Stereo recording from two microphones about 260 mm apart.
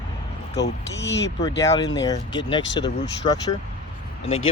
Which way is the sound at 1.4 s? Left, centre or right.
Centre.